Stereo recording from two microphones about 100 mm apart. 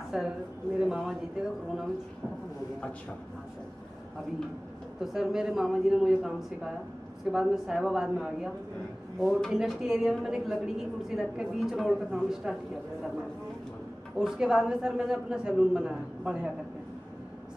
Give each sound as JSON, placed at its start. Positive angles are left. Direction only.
{"t": 0.1, "sound": "speech", "side_deg": -5}
{"t": 5.0, "sound": "speech", "side_deg": -5}
{"t": 14.1, "sound": "speech", "side_deg": -5}